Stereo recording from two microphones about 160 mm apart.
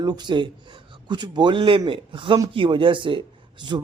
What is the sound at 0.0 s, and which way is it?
A man's voice, 25° right (ahead or behind).